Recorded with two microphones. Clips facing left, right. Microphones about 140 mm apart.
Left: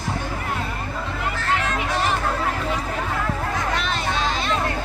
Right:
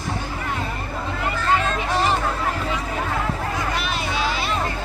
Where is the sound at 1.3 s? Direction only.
75° left (ahead or behind).